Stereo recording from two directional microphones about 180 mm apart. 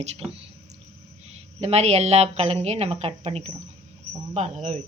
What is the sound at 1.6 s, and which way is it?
A woman's voice, 35° right (ahead or behind).